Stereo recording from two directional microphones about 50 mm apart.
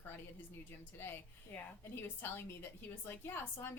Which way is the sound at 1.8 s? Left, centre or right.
Left.